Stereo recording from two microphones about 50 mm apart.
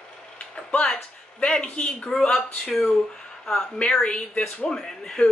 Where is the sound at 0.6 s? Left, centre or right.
Centre.